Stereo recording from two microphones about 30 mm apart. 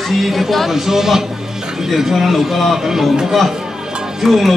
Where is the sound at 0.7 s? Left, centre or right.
Centre.